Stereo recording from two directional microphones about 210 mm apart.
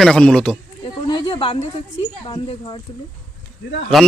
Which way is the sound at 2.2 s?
25° left (ahead or behind).